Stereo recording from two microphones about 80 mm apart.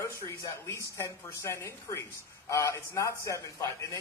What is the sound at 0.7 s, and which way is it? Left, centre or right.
A woman's voice, left.